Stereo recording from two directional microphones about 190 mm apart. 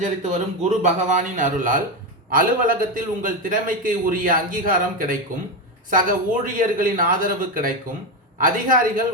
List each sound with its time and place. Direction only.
0.0 s a man's voice: 40° right (ahead or behind)